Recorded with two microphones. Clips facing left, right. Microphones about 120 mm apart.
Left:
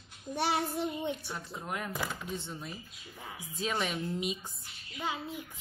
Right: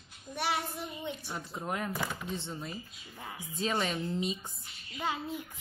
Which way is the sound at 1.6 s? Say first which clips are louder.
Right 2 dB; centre (ahead or behind).